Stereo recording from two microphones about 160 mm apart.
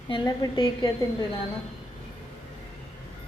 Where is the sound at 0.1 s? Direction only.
25° left (ahead or behind).